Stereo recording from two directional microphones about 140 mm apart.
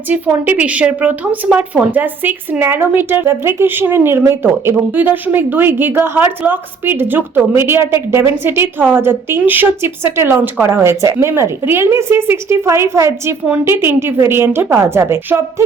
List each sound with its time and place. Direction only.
0.1 s a woman's voice: 10° right (ahead or behind)